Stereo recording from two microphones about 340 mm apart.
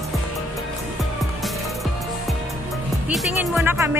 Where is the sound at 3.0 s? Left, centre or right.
Centre.